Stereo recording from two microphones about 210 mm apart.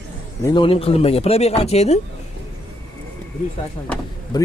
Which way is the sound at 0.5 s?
25° left (ahead or behind).